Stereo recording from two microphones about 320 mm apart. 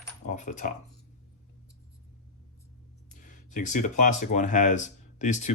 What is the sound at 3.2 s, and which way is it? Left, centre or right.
Speech, left.